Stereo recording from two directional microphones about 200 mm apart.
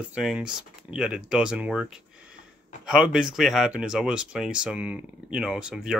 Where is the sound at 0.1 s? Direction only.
5° right (ahead or behind).